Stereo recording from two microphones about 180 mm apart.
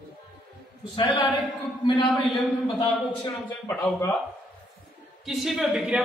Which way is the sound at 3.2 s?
15° left (ahead or behind).